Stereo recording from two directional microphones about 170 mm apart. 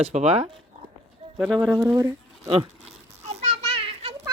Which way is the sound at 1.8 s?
20° right (ahead or behind).